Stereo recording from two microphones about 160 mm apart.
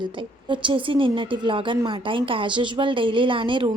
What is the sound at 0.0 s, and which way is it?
A woman's voice, 30° right (ahead or behind).